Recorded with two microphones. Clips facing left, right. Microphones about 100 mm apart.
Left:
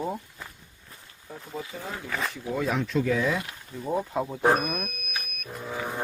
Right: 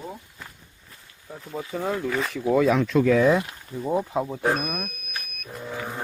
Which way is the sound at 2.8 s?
80° right.